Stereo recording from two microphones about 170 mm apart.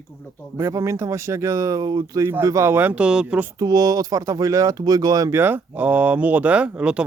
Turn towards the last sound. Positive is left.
turn(degrees=-5)  # may be behind; listen again after turning